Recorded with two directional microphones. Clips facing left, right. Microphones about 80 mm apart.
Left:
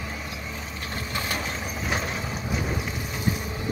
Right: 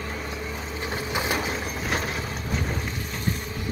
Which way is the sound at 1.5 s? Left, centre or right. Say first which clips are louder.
Right 1 dB; centre.